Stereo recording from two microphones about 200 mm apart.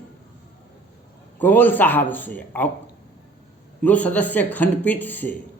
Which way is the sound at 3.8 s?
5° left (ahead or behind).